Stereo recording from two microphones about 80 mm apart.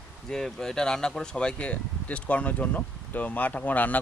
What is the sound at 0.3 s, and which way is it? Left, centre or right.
Speech, centre.